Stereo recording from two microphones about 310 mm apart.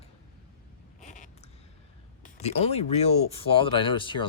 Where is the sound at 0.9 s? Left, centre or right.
Left.